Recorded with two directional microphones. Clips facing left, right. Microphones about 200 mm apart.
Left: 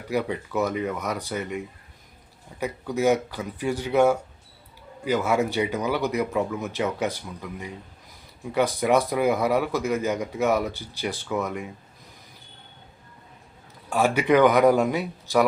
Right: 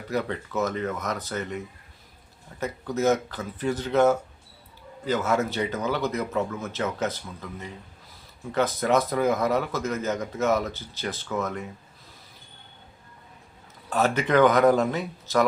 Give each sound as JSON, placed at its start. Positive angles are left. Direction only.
{"t": 0.1, "sound": "speech", "side_deg": 10}
{"t": 13.9, "sound": "speech", "side_deg": 10}